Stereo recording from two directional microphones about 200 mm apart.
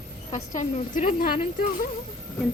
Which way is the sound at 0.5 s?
35° left (ahead or behind).